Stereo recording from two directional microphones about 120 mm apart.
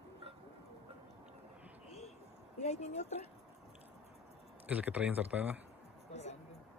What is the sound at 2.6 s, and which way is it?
Speech, 70° left (ahead or behind).